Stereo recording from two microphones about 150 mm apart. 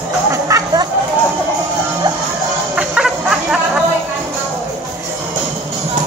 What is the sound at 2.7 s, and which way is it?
Music, 5° right (ahead or behind).